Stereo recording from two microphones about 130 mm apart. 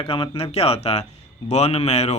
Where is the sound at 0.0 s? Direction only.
45° left (ahead or behind).